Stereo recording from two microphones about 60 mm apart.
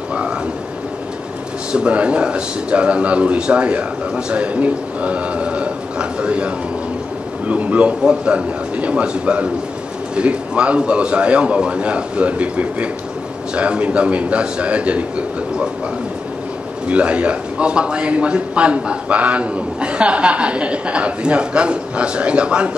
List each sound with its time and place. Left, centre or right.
0.1 s frog: centre
1.7 s a man's voice: centre
16.8 s a man's voice: right